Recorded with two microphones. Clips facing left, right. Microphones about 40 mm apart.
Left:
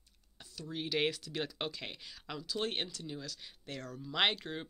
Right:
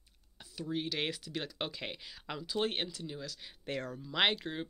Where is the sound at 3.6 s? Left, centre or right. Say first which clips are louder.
Right 6 dB; right.